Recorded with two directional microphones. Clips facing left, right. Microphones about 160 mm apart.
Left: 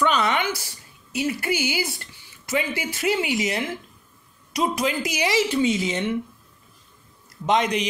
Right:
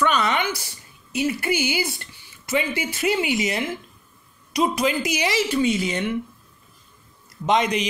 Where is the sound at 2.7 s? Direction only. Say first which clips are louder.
Right 1 dB; 20° right (ahead or behind).